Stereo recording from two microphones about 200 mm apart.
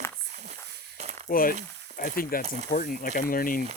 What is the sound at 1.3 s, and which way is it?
Speech, 45° left (ahead or behind).